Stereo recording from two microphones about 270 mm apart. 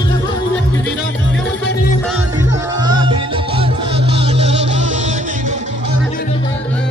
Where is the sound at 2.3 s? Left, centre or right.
Centre.